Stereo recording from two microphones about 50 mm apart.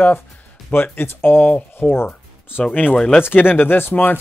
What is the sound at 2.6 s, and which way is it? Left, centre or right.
Speech, left.